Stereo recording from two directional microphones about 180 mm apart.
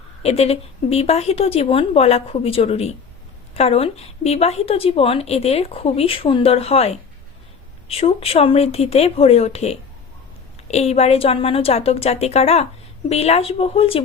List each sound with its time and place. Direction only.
0.2 s speech: 35° left (ahead or behind)